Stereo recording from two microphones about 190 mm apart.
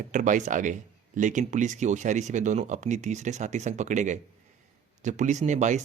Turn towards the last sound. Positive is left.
turn(degrees=-40)  # may be behind; listen again after turning